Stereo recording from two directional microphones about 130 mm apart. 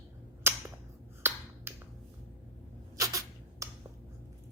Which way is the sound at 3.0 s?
25° right (ahead or behind).